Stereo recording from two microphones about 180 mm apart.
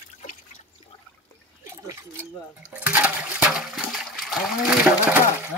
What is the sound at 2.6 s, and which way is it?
Toilet flush, 10° right (ahead or behind).